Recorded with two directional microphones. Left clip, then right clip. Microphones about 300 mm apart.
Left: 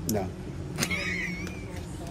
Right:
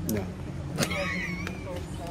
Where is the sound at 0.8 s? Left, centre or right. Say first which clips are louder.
Even; centre.